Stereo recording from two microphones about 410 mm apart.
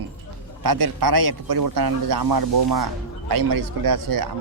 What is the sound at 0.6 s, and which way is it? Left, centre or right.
Speech, right.